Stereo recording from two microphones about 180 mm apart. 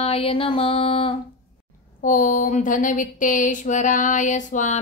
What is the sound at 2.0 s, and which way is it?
Speech, 45° left (ahead or behind).